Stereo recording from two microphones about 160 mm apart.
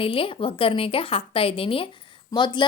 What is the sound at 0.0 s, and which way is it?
A woman's voice, 35° left (ahead or behind).